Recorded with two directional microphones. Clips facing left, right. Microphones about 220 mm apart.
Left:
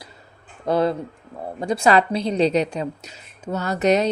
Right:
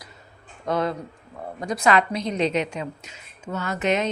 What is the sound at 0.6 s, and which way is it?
A woman's voice, 30° left (ahead or behind).